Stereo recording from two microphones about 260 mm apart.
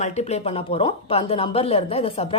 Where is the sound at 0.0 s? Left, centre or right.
Left.